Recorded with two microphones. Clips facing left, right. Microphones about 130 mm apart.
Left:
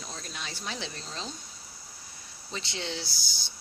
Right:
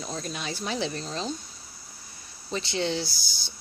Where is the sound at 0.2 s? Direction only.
5° right (ahead or behind).